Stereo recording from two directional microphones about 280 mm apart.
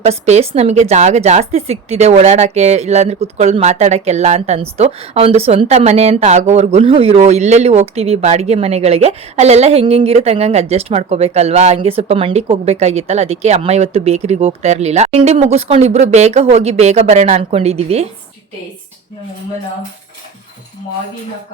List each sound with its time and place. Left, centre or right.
0.0 s speech: right